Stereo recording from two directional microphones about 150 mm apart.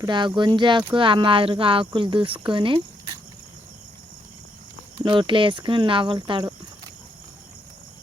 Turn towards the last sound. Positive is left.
turn(degrees=-30)  # may be behind; listen again after turning